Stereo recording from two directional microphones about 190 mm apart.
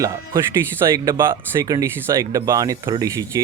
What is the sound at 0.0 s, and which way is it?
Speech, 15° right (ahead or behind).